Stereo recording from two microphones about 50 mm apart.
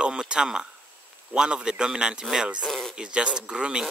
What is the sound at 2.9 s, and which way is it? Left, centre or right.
Speech, centre.